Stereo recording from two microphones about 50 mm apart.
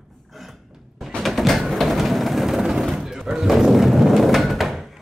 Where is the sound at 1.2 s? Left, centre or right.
Centre.